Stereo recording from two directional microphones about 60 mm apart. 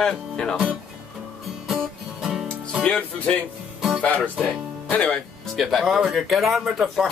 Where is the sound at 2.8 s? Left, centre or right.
Centre.